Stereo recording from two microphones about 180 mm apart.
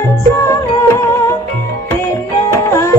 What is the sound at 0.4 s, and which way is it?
Music, 15° left (ahead or behind).